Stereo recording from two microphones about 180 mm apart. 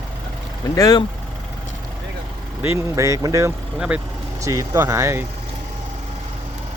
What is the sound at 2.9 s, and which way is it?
Speech, 15° right (ahead or behind).